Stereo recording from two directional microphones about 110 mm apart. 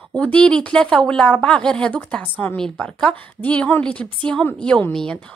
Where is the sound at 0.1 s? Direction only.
10° left (ahead or behind).